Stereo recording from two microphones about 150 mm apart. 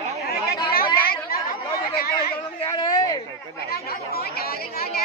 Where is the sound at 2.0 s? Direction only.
90° left.